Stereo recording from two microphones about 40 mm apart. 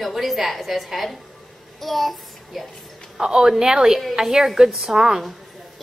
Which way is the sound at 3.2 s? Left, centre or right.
Centre.